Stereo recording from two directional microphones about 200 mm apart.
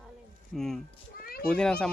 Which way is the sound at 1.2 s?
50° left (ahead or behind).